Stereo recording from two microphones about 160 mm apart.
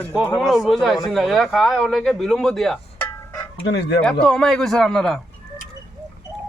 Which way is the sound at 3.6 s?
90° left.